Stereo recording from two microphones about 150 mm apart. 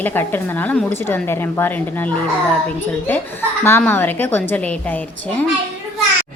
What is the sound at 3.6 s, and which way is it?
Speech, 15° left (ahead or behind).